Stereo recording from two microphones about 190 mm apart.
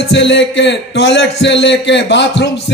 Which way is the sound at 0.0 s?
65° left (ahead or behind).